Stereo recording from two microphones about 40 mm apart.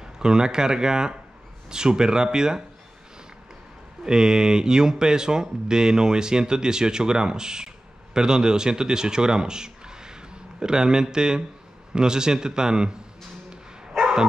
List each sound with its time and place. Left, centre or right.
0.0 s speech: centre
4.0 s speech: centre